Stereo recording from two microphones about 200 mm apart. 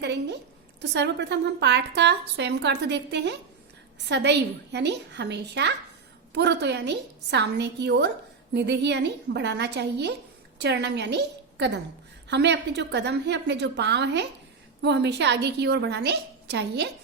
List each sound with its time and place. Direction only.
0.0 s a woman's voice: 60° right (ahead or behind)